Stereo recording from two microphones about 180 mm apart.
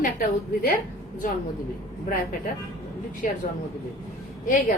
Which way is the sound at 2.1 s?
50° left (ahead or behind).